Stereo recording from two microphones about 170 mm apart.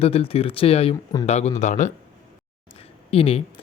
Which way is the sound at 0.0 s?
35° left (ahead or behind).